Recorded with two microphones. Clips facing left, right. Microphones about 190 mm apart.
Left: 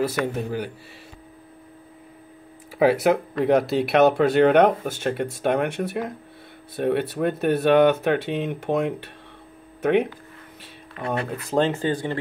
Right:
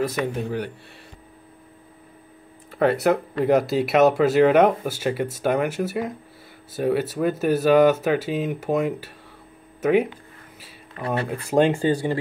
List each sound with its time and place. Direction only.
0.0 s speech: 5° left (ahead or behind)
2.8 s speech: centre (ahead or behind)
10.6 s a sound: centre (ahead or behind)
11.4 s speech: 10° right (ahead or behind)